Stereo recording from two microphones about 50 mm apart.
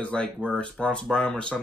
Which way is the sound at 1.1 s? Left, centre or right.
Centre.